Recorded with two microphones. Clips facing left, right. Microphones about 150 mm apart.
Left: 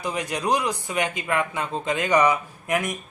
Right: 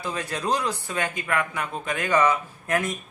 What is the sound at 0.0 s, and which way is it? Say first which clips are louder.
A man's voice: left 2 dB; 15° left (ahead or behind).